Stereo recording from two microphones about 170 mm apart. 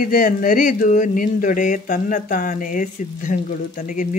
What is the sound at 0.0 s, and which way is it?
Speech, 55° left (ahead or behind).